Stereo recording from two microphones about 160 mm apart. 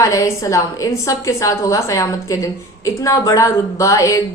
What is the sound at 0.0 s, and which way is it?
A woman's voice, 20° left (ahead or behind).